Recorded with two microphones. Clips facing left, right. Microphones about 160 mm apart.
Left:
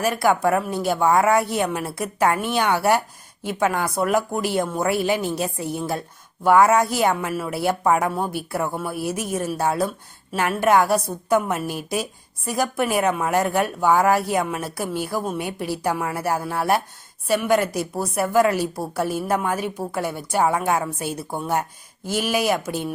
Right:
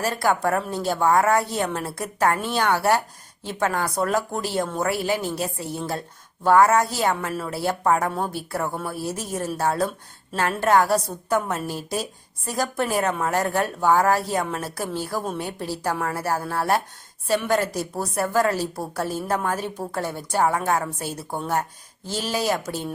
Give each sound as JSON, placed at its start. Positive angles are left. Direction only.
{"t": 0.0, "sound": "a woman's voice", "side_deg": 15}